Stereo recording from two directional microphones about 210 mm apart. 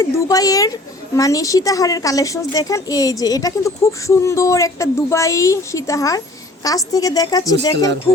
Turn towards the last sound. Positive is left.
turn(degrees=15)  # may be behind; listen again after turning